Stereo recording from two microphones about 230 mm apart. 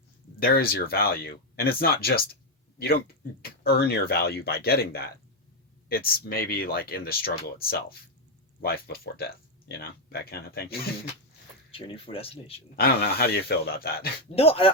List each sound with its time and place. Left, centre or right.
0.3 s speech: left
11.7 s speech: left
12.7 s speech: left
14.3 s speech: left